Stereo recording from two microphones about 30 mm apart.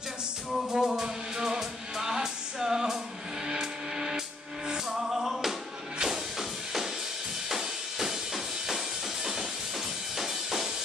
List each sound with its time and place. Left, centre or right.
0.5 s music: centre
7.4 s music: centre